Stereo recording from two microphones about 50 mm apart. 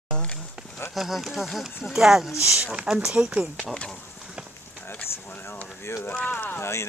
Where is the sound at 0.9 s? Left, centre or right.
Centre.